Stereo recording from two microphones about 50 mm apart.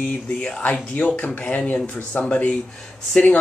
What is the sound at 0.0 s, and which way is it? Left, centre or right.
Speech, left.